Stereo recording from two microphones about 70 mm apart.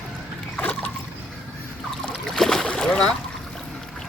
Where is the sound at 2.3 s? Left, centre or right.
Centre.